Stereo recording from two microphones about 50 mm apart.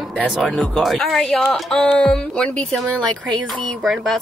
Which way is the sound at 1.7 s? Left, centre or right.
Centre.